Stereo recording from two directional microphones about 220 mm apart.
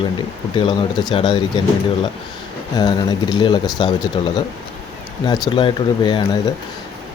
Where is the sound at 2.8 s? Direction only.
20° left (ahead or behind).